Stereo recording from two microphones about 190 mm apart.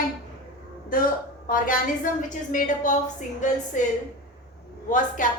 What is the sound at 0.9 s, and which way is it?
A woman's voice, 45° left (ahead or behind).